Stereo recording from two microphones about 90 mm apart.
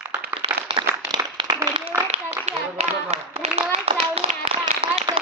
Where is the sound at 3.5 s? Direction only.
90° right.